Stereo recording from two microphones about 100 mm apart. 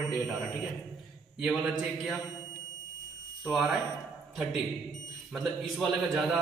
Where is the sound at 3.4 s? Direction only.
Centre (ahead or behind).